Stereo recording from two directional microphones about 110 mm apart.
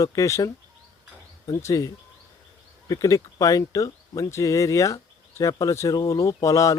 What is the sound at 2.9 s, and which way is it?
Speech, 30° left (ahead or behind).